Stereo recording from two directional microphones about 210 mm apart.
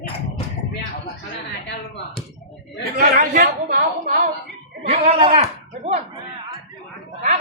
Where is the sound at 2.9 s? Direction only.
40° right (ahead or behind).